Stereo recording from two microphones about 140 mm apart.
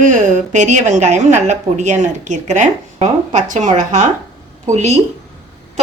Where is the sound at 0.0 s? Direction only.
65° right (ahead or behind).